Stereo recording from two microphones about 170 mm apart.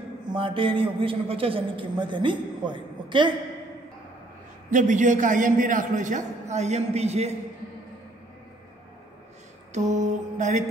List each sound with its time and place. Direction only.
0.3 s a man's voice: 30° right (ahead or behind)
4.6 s a man's voice: 50° right (ahead or behind)
9.8 s a man's voice: 45° right (ahead or behind)